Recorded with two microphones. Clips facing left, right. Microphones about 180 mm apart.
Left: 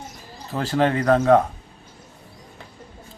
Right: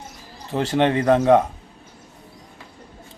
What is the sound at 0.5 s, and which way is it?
Speech, 25° right (ahead or behind).